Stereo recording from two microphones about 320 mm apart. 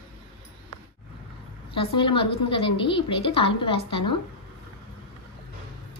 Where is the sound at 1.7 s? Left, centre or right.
Centre.